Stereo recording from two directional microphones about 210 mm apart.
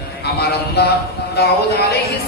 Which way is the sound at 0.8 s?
50° left (ahead or behind).